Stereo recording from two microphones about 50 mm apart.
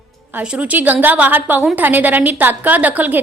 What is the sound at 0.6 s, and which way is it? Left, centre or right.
A woman's voice, right.